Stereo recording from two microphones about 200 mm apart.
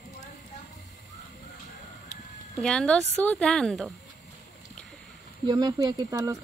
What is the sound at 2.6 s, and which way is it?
Speech, 5° left (ahead or behind).